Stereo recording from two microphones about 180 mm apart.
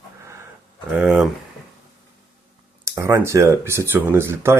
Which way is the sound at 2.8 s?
15° right (ahead or behind).